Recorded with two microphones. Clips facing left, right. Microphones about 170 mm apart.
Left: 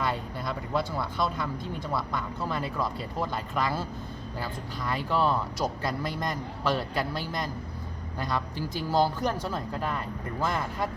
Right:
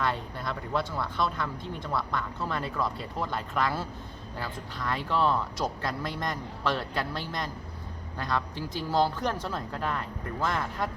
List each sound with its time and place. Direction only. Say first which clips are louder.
0.0 s speech: even; 5° left (ahead or behind)